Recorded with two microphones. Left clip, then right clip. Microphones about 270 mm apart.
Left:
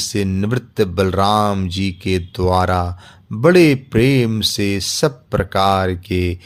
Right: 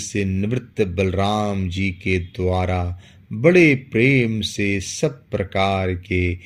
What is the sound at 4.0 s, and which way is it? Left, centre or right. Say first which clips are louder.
Speech: left 2 dB; left.